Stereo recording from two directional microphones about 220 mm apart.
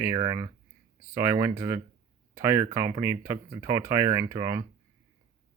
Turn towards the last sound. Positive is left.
turn(degrees=-15)  # may be behind; listen again after turning